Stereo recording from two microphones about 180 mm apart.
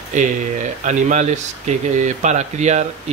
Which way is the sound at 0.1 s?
40° right (ahead or behind).